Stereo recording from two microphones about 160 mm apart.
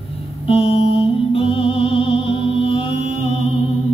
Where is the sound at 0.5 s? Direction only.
35° left (ahead or behind).